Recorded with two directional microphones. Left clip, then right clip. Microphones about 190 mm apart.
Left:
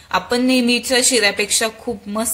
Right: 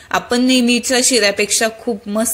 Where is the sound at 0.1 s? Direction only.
20° right (ahead or behind).